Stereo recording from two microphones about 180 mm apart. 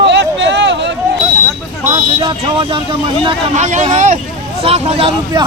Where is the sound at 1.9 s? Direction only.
25° right (ahead or behind).